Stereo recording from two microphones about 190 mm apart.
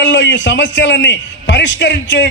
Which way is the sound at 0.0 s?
70° left (ahead or behind).